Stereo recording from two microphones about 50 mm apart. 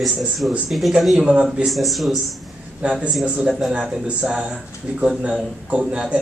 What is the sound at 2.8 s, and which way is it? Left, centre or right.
Speech, right.